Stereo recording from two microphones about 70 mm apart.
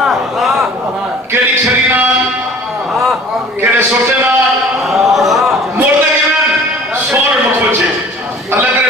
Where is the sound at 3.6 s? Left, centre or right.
Right.